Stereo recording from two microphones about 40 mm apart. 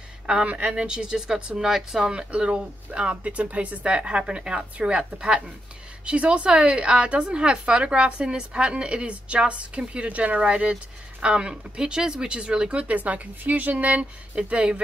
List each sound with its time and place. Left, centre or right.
0.7 s a woman's voice: right